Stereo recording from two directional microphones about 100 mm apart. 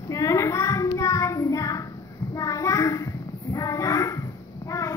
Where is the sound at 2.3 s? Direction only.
35° left (ahead or behind).